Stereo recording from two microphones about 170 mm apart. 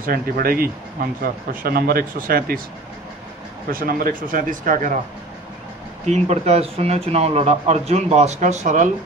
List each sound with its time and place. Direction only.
0.0 s speech: 60° right (ahead or behind)
3.7 s speech: 60° right (ahead or behind)
6.0 s speech: 40° right (ahead or behind)